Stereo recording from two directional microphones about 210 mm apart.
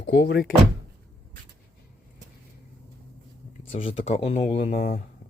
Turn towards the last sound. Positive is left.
turn(degrees=35)  # may be behind; listen again after turning